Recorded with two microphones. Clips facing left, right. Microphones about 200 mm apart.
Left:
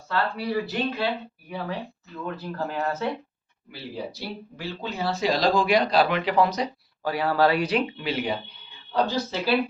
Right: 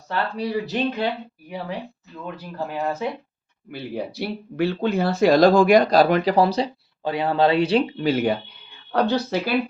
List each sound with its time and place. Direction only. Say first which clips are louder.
0.1 s speech: right 2 dB; 20° right (ahead or behind)
2.2 s speech: even; 15° right (ahead or behind)
3.7 s speech: right 5 dB; 60° right (ahead or behind); by 8.0 s 30° right (ahead or behind)
8.0 s speech: right 8 dB; 45° right (ahead or behind)
8.9 s speech: right 4 dB; 65° right (ahead or behind)